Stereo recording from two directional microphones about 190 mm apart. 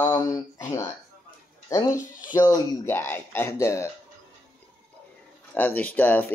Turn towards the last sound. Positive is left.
turn(degrees=10)  # may be behind; listen again after turning